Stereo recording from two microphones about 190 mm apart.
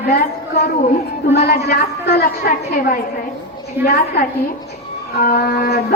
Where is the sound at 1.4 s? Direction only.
55° left (ahead or behind).